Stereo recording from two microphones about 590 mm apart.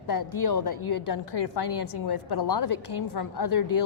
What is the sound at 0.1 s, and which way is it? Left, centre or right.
A woman's voice, left.